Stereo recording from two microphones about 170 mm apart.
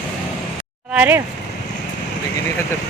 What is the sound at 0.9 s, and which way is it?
Speech, 10° right (ahead or behind).